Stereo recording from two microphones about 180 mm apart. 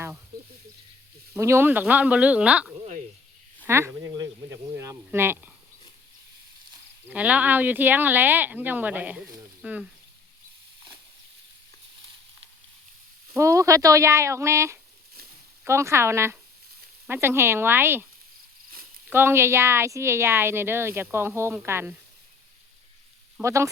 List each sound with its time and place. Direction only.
1.3 s a woman's voice: 15° right (ahead or behind)
3.7 s a sound: 15° right (ahead or behind)
7.1 s a woman's voice: 10° right (ahead or behind)
13.3 s a woman's voice: 15° right (ahead or behind)
19.1 s a woman's voice: 15° right (ahead or behind)
23.4 s a woman's voice: 15° right (ahead or behind)